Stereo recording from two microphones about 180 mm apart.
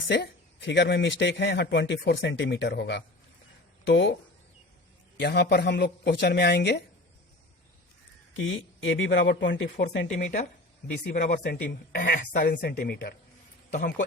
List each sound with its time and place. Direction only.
0.1 s a man's voice: 75° left (ahead or behind)
3.8 s speech: 90° left
5.1 s speech: 70° left (ahead or behind)
8.4 s speech: 90° left
11.1 s speech: 50° left (ahead or behind)